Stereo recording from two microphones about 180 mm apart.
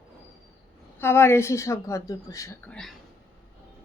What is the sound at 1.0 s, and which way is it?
Speech, 15° left (ahead or behind).